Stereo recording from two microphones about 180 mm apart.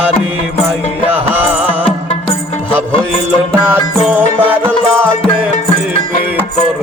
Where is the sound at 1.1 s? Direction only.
10° right (ahead or behind).